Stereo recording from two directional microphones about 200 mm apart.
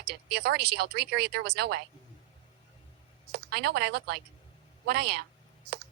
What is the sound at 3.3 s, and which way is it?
Speech, 55° right (ahead or behind).